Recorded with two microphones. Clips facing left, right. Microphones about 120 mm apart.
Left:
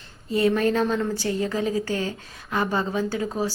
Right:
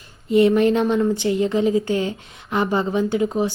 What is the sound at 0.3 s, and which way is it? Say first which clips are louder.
A woman's voice: right 6 dB; 20° right (ahead or behind).